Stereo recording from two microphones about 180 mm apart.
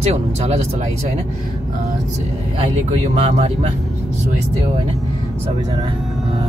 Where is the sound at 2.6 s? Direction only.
40° right (ahead or behind).